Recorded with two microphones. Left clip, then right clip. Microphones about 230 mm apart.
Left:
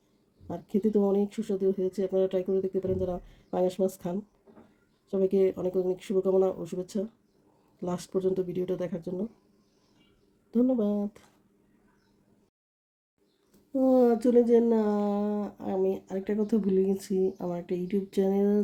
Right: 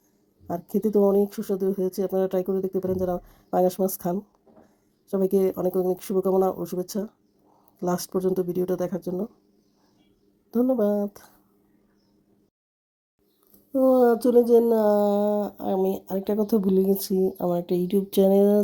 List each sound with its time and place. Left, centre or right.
0.4 s speech: right
10.5 s speech: right
13.7 s speech: centre; by 18.6 s right